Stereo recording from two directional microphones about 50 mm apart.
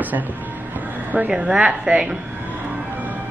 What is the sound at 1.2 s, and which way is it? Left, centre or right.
Speech, right.